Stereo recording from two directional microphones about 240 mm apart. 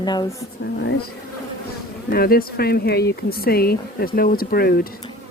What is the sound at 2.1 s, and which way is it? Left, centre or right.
Speech, left.